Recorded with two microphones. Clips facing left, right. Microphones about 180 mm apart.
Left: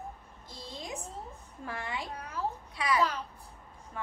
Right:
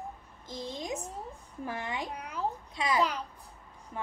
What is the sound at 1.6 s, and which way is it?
A child's voice, 20° right (ahead or behind).